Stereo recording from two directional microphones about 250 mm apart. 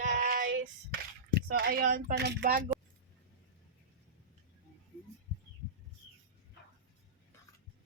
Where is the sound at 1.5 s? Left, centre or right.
Right.